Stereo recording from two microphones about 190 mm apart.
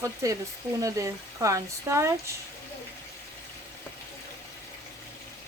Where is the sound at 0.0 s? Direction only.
15° right (ahead or behind).